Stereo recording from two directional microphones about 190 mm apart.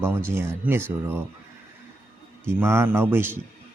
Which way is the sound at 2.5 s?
15° right (ahead or behind).